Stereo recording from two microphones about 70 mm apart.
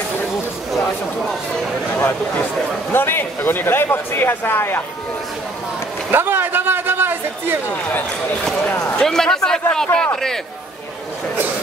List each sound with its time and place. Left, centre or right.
2.0 s speech: left
6.1 s a sound: right
9.0 s speech: centre